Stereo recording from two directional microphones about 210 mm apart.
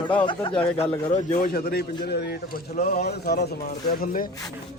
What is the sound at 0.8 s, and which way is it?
A man's voice, 35° left (ahead or behind).